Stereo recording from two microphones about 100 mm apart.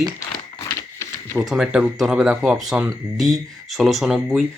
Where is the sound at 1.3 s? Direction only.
5° right (ahead or behind).